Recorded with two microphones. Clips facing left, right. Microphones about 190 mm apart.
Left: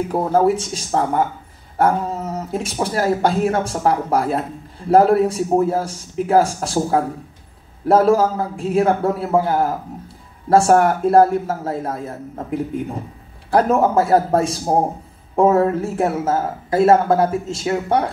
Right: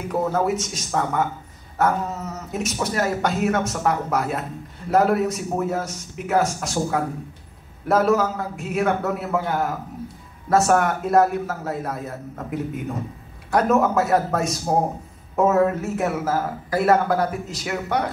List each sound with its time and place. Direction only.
0.1 s speech: 30° left (ahead or behind)
13.5 s speech: 30° left (ahead or behind)